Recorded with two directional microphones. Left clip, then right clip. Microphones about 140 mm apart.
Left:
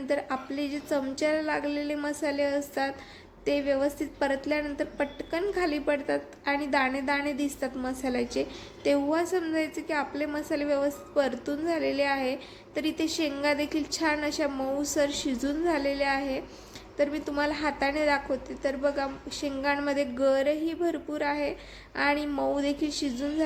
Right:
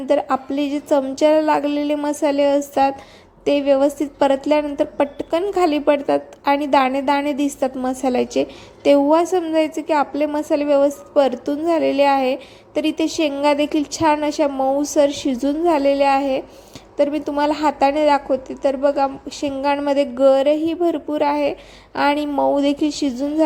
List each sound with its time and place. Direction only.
0.1 s a woman's voice: 45° right (ahead or behind)